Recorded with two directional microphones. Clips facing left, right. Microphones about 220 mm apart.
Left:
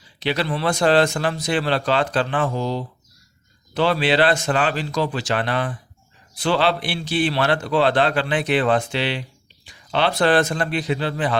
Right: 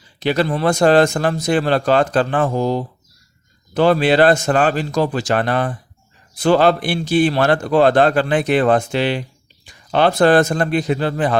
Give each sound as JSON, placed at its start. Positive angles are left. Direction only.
{"t": 0.2, "sound": "a man's voice", "side_deg": -45}